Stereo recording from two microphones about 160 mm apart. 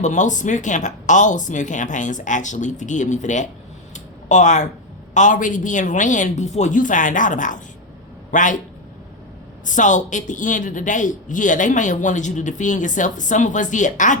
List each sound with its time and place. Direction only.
0.0 s speech: 50° left (ahead or behind)
3.9 s a sound: 50° left (ahead or behind)
5.1 s speech: 50° left (ahead or behind)
9.6 s speech: 50° left (ahead or behind)